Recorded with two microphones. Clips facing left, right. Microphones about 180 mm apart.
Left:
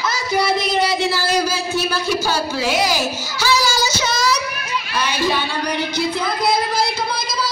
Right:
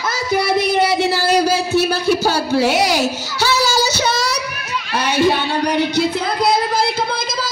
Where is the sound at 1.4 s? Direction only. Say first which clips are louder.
Right 5 dB; 65° right (ahead or behind).